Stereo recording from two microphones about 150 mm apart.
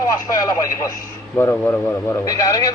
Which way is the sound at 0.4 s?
25° left (ahead or behind).